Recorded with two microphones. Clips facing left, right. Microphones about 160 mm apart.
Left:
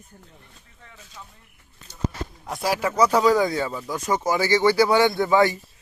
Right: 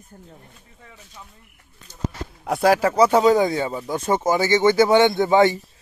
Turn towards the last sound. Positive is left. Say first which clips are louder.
# right 3 dB
turn(degrees=-25)  # may be behind; listen again after turning